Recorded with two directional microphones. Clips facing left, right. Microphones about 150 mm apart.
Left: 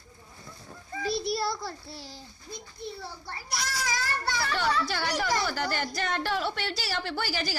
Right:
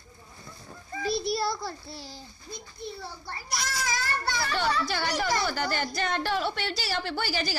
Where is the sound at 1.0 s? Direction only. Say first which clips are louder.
Right 1 dB; 15° right (ahead or behind).